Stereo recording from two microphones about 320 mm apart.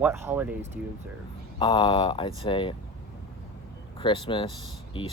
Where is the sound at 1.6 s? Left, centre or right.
Centre.